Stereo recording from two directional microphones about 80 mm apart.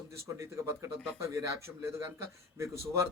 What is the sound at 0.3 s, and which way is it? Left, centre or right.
Speech, right.